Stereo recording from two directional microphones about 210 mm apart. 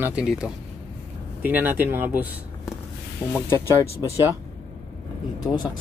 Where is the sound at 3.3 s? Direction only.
10° left (ahead or behind).